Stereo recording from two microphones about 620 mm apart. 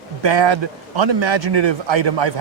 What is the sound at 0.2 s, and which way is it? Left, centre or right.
A man's voice, right.